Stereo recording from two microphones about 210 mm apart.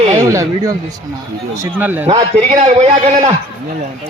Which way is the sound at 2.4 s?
35° right (ahead or behind).